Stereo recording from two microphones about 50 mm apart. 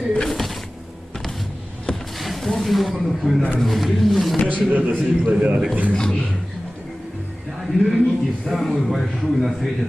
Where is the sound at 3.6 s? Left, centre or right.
Centre.